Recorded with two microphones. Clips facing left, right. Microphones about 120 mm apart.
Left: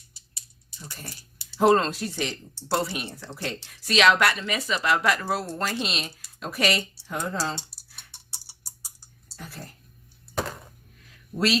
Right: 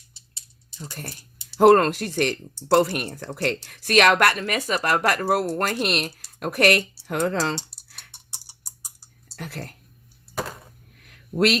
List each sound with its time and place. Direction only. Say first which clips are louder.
0.8 s a woman's voice: right 5 dB; 50° right (ahead or behind); by 7.6 s 75° right (ahead or behind)
9.3 s speech: right 6 dB; 70° right (ahead or behind)
10.9 s a sound: right 8 dB; 65° right (ahead or behind)